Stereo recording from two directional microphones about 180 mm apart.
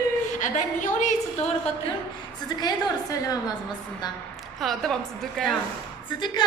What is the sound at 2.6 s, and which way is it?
Speech, 25° left (ahead or behind).